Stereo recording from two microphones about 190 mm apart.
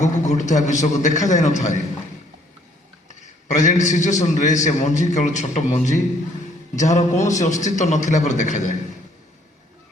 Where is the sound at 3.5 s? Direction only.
40° left (ahead or behind).